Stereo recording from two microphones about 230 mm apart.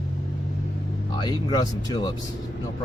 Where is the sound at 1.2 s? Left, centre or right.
Centre.